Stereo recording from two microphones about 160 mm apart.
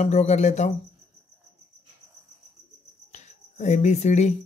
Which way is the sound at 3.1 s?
45° left (ahead or behind).